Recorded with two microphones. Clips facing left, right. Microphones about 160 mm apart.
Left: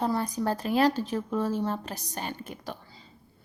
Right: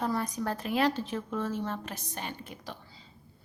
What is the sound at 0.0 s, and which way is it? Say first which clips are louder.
A woman's voice: left 3 dB; 30° left (ahead or behind).